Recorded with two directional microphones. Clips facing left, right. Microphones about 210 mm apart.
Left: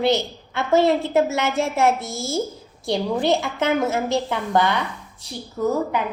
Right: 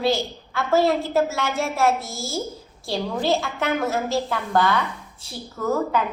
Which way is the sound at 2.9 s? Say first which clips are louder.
Left 3 dB; 15° left (ahead or behind).